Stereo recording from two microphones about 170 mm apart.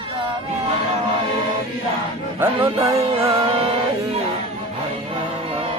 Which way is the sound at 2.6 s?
35° right (ahead or behind).